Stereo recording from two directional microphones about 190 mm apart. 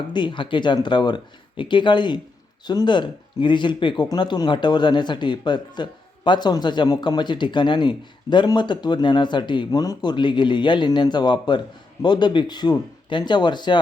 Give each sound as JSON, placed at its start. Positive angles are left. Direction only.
{"t": 0.1, "sound": "speech", "side_deg": 25}